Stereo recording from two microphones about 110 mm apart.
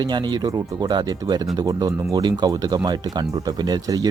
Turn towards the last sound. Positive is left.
turn(degrees=-35)  # may be behind; listen again after turning